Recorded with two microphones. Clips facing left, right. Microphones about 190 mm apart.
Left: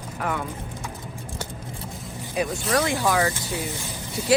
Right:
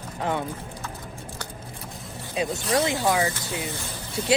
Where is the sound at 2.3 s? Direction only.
20° right (ahead or behind).